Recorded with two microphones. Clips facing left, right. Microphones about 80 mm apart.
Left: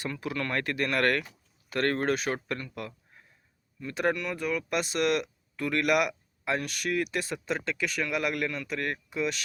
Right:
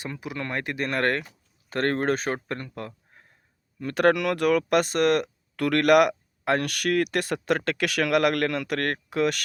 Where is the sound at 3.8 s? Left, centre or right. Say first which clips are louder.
Right 8 dB; right.